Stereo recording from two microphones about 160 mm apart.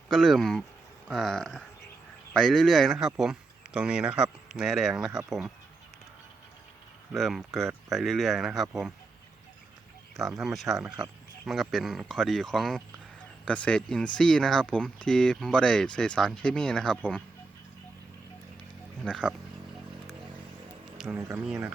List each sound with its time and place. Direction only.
0.1 s speech: centre (ahead or behind)
7.1 s speech: centre (ahead or behind)
10.2 s speech: centre (ahead or behind)
19.0 s speech: 5° left (ahead or behind)
21.2 s speech: 20° right (ahead or behind)
21.4 s speech: 5° right (ahead or behind)